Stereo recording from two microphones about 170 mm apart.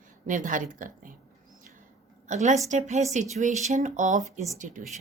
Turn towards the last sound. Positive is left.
turn(degrees=-50)  # may be behind; listen again after turning